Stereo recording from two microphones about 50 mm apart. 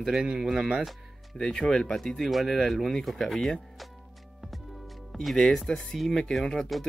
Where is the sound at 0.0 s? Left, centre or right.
Centre.